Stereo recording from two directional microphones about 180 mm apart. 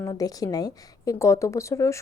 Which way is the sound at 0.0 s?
20° left (ahead or behind).